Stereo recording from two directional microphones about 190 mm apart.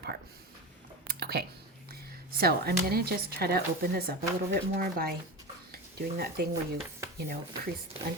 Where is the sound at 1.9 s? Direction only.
55° right (ahead or behind).